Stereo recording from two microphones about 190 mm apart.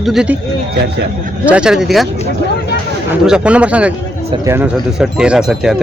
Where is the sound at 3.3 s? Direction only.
5° right (ahead or behind).